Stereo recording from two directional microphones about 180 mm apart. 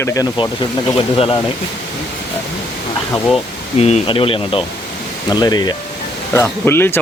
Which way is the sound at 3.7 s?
35° left (ahead or behind).